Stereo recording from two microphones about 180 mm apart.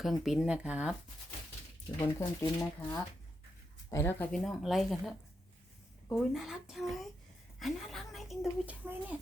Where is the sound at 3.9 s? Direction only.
10° left (ahead or behind).